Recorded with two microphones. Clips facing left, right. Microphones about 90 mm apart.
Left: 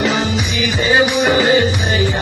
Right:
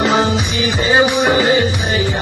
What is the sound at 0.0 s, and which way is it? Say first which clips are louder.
Music: right 3 dB; 35° right (ahead or behind).